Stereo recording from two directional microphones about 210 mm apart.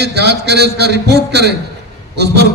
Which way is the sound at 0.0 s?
50° right (ahead or behind).